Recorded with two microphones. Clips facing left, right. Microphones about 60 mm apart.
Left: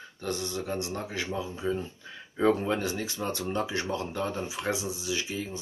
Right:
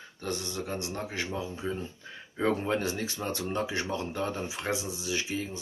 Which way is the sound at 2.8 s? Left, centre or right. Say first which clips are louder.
Left 1 dB; right.